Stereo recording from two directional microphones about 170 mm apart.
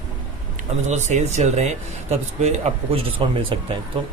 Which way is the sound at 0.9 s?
45° right (ahead or behind).